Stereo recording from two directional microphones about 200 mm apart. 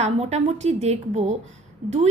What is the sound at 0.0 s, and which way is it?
A woman's voice, 35° right (ahead or behind).